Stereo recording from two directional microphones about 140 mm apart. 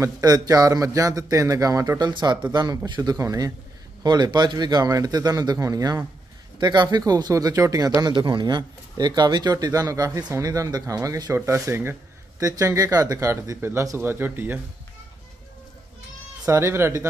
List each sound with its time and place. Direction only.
0.0 s speech: 25° right (ahead or behind)
16.4 s speech: 20° right (ahead or behind)